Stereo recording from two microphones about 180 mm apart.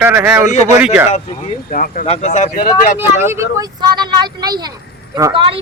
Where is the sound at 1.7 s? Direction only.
50° left (ahead or behind).